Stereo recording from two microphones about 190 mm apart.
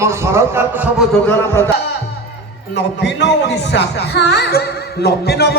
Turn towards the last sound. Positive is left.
turn(degrees=60)  # may be behind; listen again after turning